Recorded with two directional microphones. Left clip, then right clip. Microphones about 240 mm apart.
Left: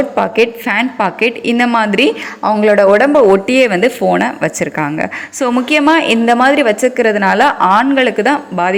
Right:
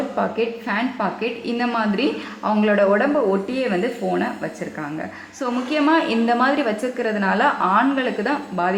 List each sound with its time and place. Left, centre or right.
0.2 s a woman's voice: left